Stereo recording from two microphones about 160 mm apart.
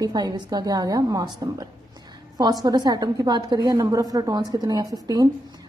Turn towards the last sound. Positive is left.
turn(degrees=-25)  # may be behind; listen again after turning